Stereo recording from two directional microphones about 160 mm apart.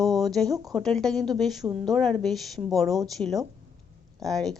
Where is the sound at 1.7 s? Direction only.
30° right (ahead or behind).